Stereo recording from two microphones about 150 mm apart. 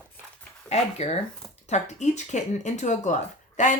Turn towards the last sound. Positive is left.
turn(degrees=55)  # may be behind; listen again after turning